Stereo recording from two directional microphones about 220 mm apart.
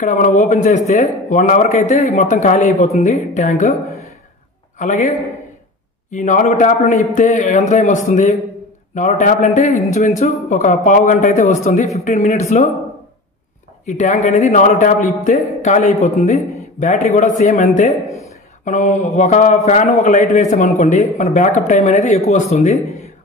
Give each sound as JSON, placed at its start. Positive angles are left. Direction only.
{"t": 0.0, "sound": "a man's voice", "side_deg": 35}
{"t": 4.7, "sound": "speech", "side_deg": 30}
{"t": 6.1, "sound": "a man's voice", "side_deg": 35}
{"t": 13.8, "sound": "a man's voice", "side_deg": 30}
{"t": 18.7, "sound": "a man's voice", "side_deg": 30}